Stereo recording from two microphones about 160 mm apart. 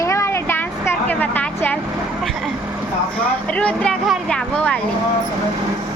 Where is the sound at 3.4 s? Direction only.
10° left (ahead or behind).